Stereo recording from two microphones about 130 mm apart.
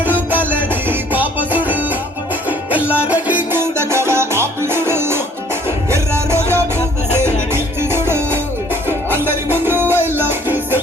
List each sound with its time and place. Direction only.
0.0 s music: 15° right (ahead or behind)